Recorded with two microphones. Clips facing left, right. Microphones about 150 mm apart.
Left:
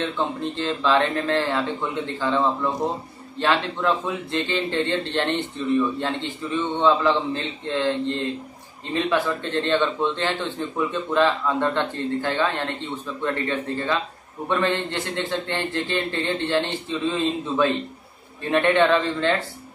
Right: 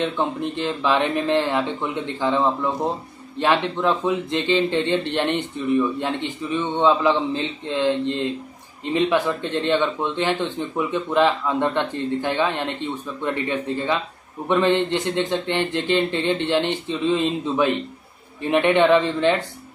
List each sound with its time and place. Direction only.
0.0 s a man's voice: 15° right (ahead or behind)